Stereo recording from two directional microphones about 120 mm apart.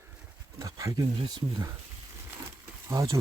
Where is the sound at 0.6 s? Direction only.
30° right (ahead or behind).